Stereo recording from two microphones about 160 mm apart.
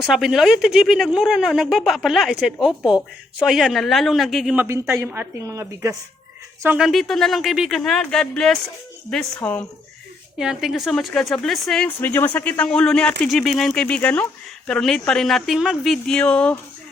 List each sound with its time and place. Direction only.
0.0 s speech: 5° right (ahead or behind); by 6.0 s 20° right (ahead or behind)
6.7 s speech: centre (ahead or behind)
10.3 s speech: 5° right (ahead or behind)